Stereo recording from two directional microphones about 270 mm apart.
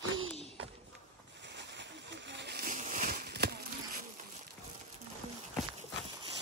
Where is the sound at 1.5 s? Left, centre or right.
Right.